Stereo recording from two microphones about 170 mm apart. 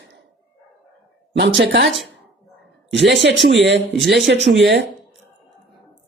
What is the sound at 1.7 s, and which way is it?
Speech, 90° right.